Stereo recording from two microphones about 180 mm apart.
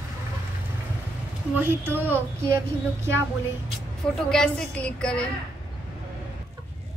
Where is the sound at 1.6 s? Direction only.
10° right (ahead or behind).